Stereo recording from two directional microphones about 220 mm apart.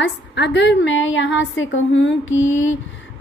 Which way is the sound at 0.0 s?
55° left (ahead or behind).